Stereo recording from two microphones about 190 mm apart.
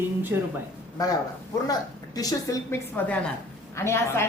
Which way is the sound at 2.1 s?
15° left (ahead or behind).